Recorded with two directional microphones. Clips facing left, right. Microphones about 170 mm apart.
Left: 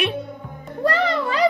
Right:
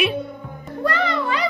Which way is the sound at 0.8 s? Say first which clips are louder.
Left 1 dB; 35° left (ahead or behind).